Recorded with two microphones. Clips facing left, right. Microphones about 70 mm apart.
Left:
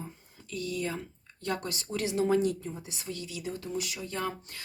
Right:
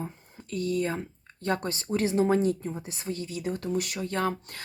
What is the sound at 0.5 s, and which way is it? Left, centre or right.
Speech, right.